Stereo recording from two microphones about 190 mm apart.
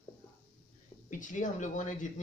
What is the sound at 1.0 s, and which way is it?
Speech, 40° left (ahead or behind).